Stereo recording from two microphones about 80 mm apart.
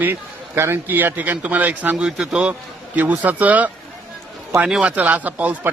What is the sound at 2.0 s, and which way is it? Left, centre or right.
A man's voice, centre.